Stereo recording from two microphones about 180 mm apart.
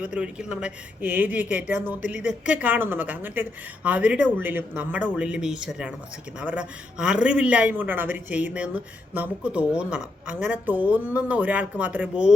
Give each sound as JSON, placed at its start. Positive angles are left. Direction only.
{"t": 0.0, "sound": "speech", "side_deg": -5}